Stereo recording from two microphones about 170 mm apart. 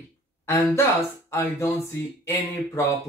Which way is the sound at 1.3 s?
15° left (ahead or behind).